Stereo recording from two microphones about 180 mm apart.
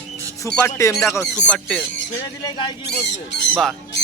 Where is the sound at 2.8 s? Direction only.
65° left (ahead or behind).